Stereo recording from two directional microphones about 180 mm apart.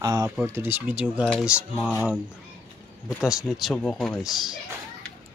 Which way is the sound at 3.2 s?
Centre (ahead or behind).